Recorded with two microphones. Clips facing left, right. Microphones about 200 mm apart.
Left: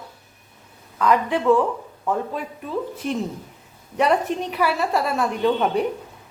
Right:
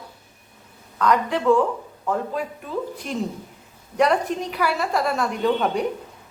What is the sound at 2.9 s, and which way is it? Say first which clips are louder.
A woman's voice: left 2 dB; centre (ahead or behind).